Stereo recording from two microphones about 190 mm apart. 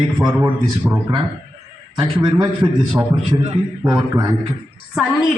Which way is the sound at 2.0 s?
25° right (ahead or behind).